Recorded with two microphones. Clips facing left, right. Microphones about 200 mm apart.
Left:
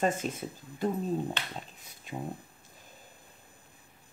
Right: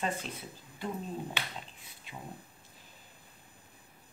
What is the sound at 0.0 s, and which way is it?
Speech, 45° left (ahead or behind).